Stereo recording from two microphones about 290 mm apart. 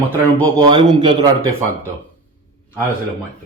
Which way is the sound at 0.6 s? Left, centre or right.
Centre.